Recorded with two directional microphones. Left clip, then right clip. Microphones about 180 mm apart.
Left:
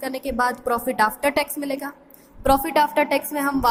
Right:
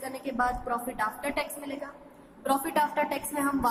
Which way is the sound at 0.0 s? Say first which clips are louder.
Left 7 dB; 55° left (ahead or behind).